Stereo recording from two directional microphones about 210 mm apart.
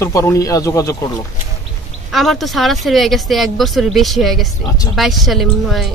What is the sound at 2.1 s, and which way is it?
Speech, centre (ahead or behind).